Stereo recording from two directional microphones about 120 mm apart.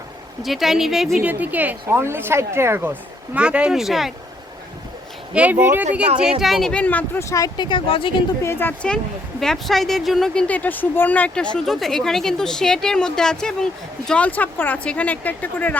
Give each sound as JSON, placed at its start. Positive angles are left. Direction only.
{"t": 0.4, "sound": "speech", "side_deg": 0}
{"t": 1.2, "sound": "speech", "side_deg": -15}
{"t": 3.3, "sound": "speech", "side_deg": -10}
{"t": 5.3, "sound": "speech", "side_deg": -10}
{"t": 6.4, "sound": "speech", "side_deg": 0}
{"t": 8.4, "sound": "speech", "side_deg": 20}